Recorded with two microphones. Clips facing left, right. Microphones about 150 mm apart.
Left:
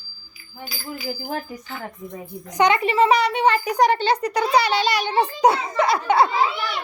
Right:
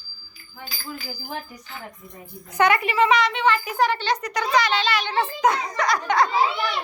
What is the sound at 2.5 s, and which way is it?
A child's voice, 20° left (ahead or behind).